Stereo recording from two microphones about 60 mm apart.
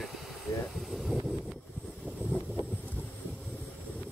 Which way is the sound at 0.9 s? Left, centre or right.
Centre.